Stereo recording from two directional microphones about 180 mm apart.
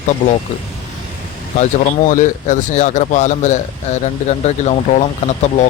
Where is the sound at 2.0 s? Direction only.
45° left (ahead or behind).